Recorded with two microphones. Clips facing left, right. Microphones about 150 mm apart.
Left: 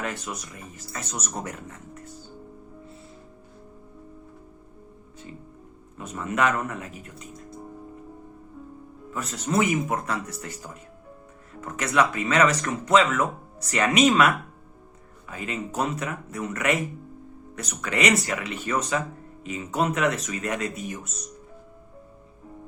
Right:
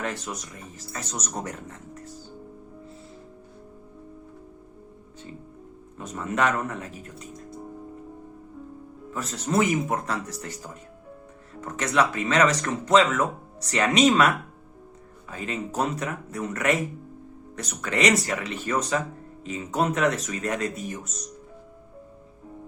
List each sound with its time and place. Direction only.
0.0 s speech: 35° right (ahead or behind)
1.5 s speech: 35° right (ahead or behind)
6.1 s speech: 35° right (ahead or behind)
9.1 s speech: 35° right (ahead or behind)
11.6 s speech: 35° right (ahead or behind)
21.0 s speech: centre (ahead or behind)